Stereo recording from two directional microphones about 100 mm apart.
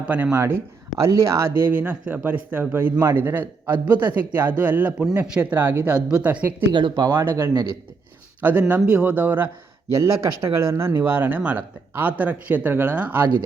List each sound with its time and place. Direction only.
0.3 s a man's voice: 30° right (ahead or behind); by 6.4 s 10° right (ahead or behind)
6.7 s speech: 50° right (ahead or behind)
7.1 s a man's voice: 25° right (ahead or behind)